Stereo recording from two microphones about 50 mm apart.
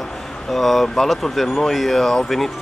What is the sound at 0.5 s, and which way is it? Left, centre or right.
Speech, centre.